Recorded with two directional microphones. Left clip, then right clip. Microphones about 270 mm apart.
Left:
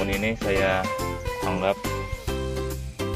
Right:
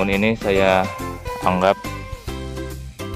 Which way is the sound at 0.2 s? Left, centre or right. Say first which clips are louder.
Right 5 dB; right.